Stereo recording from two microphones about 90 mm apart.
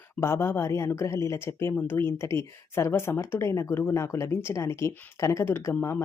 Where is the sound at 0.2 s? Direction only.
30° left (ahead or behind).